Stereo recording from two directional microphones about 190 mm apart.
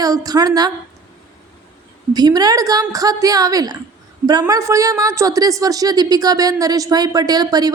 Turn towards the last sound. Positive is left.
turn(degrees=-20)  # may be behind; listen again after turning